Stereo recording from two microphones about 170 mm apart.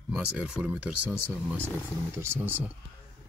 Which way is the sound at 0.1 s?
5° right (ahead or behind).